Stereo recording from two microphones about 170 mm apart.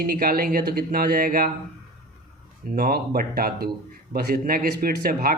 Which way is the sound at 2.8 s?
65° right (ahead or behind).